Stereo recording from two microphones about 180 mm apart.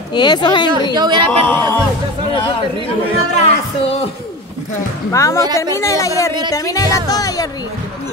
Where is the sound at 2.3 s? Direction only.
30° left (ahead or behind).